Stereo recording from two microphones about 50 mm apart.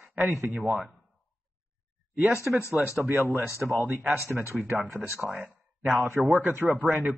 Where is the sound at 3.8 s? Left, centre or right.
Right.